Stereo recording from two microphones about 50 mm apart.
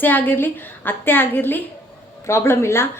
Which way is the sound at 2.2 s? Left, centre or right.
Left.